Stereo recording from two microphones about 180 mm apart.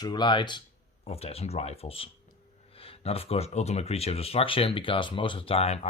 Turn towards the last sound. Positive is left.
turn(degrees=35)  # may be behind; listen again after turning